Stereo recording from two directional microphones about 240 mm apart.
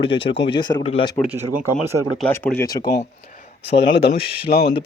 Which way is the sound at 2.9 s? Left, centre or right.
Left.